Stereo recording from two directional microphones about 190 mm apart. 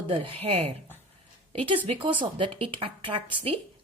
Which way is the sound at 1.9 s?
30° right (ahead or behind).